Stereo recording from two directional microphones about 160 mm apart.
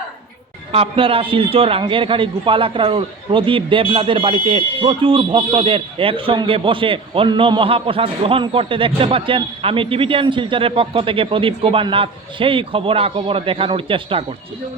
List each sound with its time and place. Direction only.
0.7 s a man's voice: 35° right (ahead or behind)